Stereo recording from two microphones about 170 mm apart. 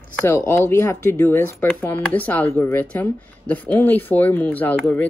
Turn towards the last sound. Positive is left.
turn(degrees=10)  # may be behind; listen again after turning